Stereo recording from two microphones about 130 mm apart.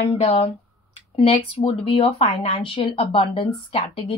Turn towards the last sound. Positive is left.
turn(degrees=40)  # may be behind; listen again after turning